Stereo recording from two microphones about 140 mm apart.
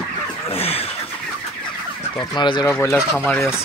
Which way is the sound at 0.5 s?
45° left (ahead or behind).